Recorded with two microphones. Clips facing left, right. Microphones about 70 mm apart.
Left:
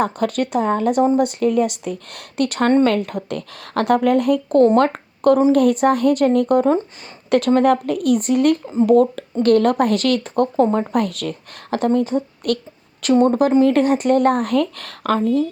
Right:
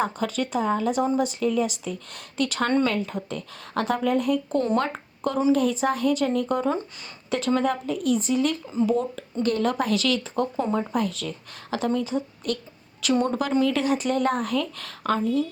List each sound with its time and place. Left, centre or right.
0.0 s speech: left
11.7 s a woman's voice: left
13.7 s a woman's voice: left